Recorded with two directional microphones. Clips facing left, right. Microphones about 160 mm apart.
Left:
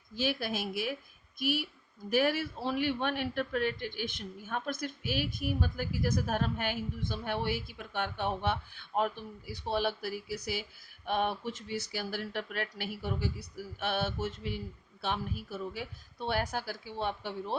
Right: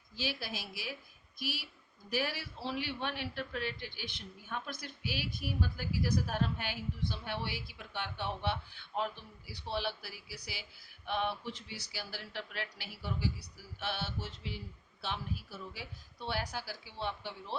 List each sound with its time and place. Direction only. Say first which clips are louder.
0.2 s a man's voice: left 7 dB; 50° left (ahead or behind)